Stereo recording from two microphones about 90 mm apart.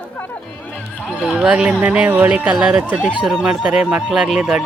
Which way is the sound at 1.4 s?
15° right (ahead or behind).